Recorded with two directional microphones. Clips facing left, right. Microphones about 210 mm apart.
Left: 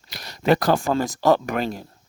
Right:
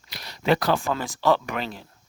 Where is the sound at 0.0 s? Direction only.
45° left (ahead or behind).